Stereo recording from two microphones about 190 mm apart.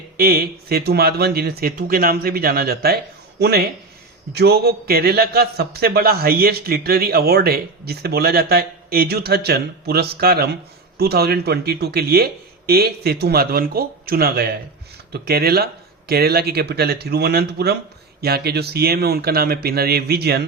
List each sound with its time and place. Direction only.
0.2 s a man's voice: 55° right (ahead or behind)